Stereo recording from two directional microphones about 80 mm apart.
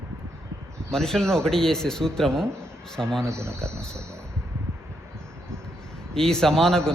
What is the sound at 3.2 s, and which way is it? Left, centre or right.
Cricket, right.